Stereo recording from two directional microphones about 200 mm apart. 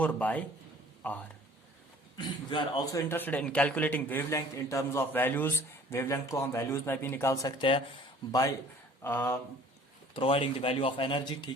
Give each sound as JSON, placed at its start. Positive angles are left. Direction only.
{"t": 0.0, "sound": "a man's voice", "side_deg": 5}
{"t": 2.1, "sound": "a man's voice", "side_deg": 20}
{"t": 9.0, "sound": "speech", "side_deg": 10}
{"t": 10.2, "sound": "speech", "side_deg": 25}